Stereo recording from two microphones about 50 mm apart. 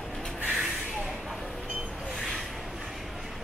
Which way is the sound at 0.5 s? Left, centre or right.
Centre.